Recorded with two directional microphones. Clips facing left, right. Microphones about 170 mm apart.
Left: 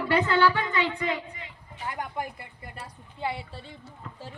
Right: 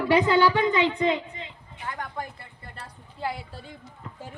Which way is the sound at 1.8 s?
20° left (ahead or behind).